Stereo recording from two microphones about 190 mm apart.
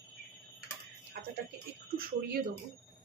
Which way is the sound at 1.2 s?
55° right (ahead or behind).